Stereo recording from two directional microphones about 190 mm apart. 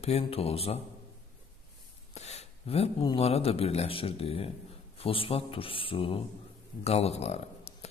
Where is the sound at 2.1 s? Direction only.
35° left (ahead or behind).